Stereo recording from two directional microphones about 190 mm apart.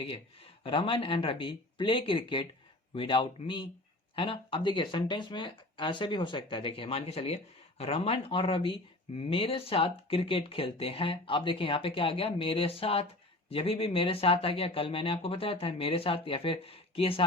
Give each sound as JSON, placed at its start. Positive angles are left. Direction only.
{"t": 0.0, "sound": "speech", "side_deg": 30}